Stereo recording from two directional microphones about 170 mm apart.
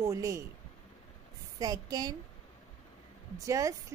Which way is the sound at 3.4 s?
20° right (ahead or behind).